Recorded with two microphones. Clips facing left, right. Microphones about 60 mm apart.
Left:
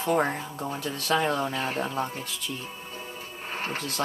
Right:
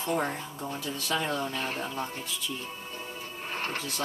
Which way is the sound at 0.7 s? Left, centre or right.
Left.